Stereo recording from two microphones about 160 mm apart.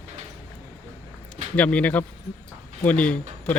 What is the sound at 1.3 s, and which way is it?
Speech, 10° left (ahead or behind).